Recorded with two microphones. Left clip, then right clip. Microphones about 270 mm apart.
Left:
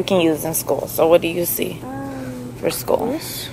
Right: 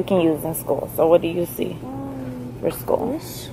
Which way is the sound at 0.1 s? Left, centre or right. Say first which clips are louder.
Left 2 dB; centre.